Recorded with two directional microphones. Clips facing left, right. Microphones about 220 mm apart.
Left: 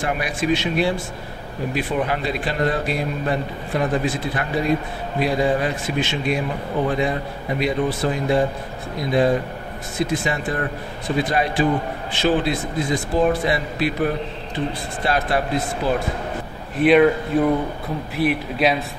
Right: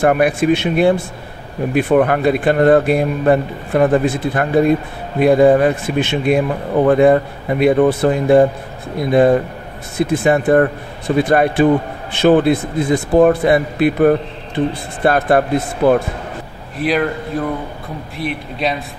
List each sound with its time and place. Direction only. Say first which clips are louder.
0.0 s a man's voice: right 10 dB; 55° right (ahead or behind)
16.7 s speech: left 4 dB; centre (ahead or behind)
18.1 s speech: left 4 dB; centre (ahead or behind)